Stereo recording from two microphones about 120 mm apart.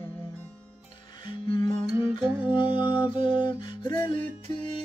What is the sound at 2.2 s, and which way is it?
Music, 10° right (ahead or behind).